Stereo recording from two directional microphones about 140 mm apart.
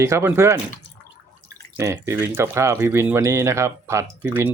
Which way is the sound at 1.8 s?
20° right (ahead or behind).